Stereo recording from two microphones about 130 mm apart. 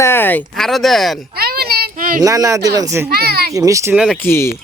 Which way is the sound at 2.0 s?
90° right.